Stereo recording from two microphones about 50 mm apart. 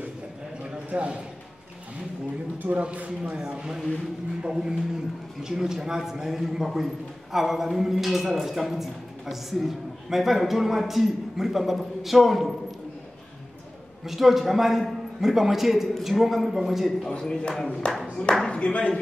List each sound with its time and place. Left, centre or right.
0.7 s clip-clop: right
2.8 s speech: right
3.3 s a man's voice: centre
14.0 s a man's voice: centre
17.1 s speech: centre